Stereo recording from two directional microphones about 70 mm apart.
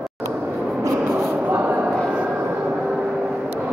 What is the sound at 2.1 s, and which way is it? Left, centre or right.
Vehicle, centre.